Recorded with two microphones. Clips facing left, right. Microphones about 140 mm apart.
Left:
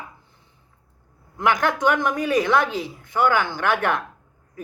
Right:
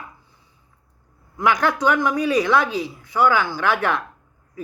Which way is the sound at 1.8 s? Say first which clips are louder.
Right 2 dB; 50° left (ahead or behind).